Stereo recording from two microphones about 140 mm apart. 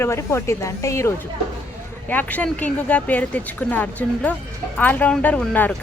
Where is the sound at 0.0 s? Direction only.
20° left (ahead or behind).